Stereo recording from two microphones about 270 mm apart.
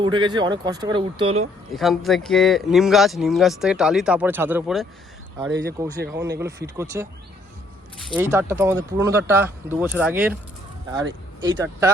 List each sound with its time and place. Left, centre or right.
0.0 s speech: centre
1.7 s speech: centre
5.5 s speech: right
6.4 s speech: centre
8.1 s speech: centre
11.3 s speech: centre